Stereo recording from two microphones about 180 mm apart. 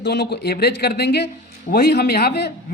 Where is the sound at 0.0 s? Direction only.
70° left (ahead or behind).